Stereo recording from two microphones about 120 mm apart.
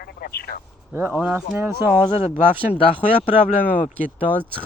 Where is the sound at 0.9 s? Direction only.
15° right (ahead or behind).